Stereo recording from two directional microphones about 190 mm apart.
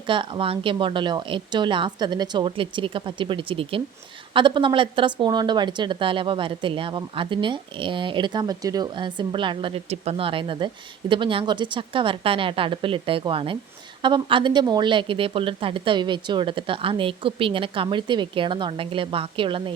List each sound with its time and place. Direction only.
0.1 s speech: 25° right (ahead or behind)